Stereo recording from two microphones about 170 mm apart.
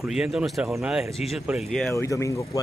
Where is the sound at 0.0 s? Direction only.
Centre (ahead or behind).